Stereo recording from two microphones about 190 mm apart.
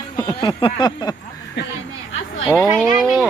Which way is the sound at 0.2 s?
20° left (ahead or behind).